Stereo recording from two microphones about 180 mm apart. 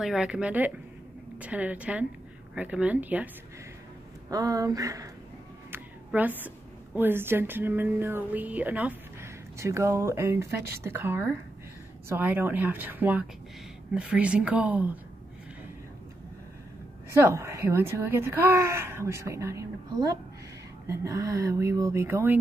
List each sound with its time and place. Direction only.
0.0 s speech: 5° right (ahead or behind)
4.3 s a woman's voice: 20° right (ahead or behind)
17.1 s speech: 15° right (ahead or behind)